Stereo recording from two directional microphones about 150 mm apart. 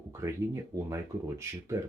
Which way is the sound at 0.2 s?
20° right (ahead or behind).